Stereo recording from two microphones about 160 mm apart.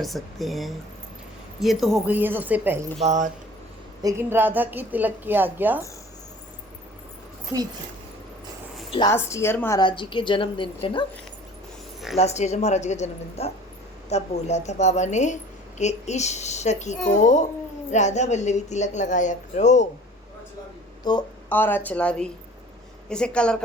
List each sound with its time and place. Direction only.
0.0 s a woman's voice: centre (ahead or behind)
3.0 s speech: 45° right (ahead or behind)
4.0 s a woman's voice: 15° right (ahead or behind)
7.5 s speech: 20° right (ahead or behind)
9.0 s a woman's voice: 15° left (ahead or behind)
9.8 s a woman's voice: 30° left (ahead or behind)
12.1 s speech: 45° left (ahead or behind)
21.0 s speech: 25° left (ahead or behind)
21.5 s a woman's voice: 10° left (ahead or behind)